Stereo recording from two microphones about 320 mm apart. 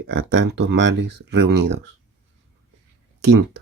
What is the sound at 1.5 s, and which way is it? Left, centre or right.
Speech, right.